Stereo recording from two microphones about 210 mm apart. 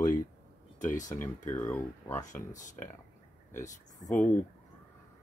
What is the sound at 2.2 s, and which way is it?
Speech, 35° left (ahead or behind).